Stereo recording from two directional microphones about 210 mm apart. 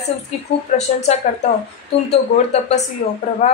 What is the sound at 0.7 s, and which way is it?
Speech, 35° left (ahead or behind).